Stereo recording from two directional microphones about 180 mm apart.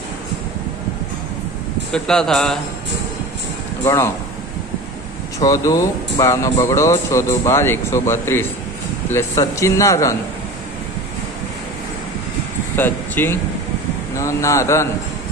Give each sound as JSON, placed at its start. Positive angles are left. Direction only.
{"t": 1.9, "sound": "speech", "side_deg": 5}
{"t": 3.8, "sound": "speech", "side_deg": 15}
{"t": 5.4, "sound": "speech", "side_deg": 20}
{"t": 12.7, "sound": "speech", "side_deg": 10}